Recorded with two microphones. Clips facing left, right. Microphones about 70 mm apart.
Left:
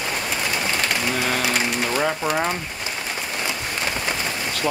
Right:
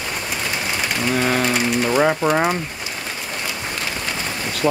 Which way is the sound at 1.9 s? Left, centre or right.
Centre.